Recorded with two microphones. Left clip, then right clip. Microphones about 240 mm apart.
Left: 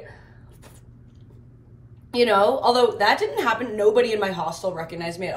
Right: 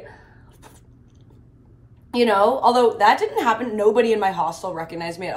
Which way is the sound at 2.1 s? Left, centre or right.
Centre.